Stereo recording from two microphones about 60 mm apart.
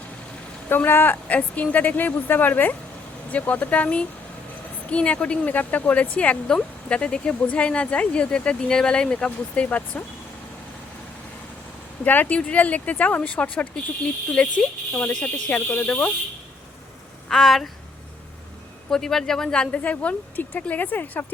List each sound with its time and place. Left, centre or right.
0.7 s a woman's voice: left
12.0 s a woman's voice: left
17.2 s speech: centre
18.9 s speech: centre
19.7 s a woman's voice: left